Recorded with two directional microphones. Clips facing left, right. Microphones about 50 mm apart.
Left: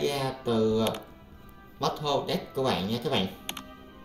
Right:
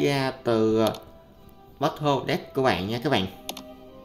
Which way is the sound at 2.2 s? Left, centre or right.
Right.